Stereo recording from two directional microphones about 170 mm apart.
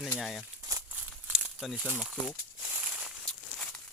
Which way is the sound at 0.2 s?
Centre (ahead or behind).